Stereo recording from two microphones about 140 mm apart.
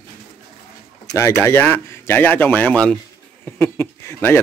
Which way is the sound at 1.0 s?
20° left (ahead or behind).